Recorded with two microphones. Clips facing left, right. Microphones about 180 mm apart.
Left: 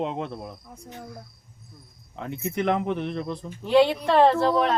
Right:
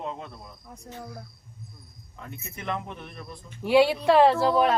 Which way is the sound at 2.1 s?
75° left (ahead or behind).